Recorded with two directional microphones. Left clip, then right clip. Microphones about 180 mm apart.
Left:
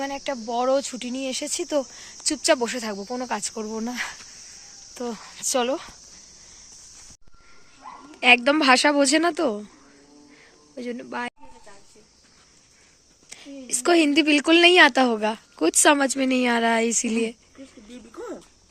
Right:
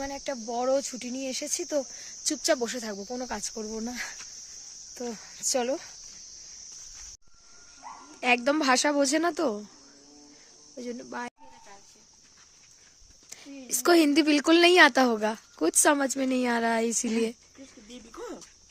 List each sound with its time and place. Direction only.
0.0 s speech: 10° right (ahead or behind)
8.2 s speech: 10° right (ahead or behind)
10.8 s speech: 15° right (ahead or behind)
13.3 s a sound: 20° right (ahead or behind)
13.8 s a woman's voice: 25° right (ahead or behind)
17.2 s speech: 25° right (ahead or behind)
18.1 s a sound: 35° right (ahead or behind)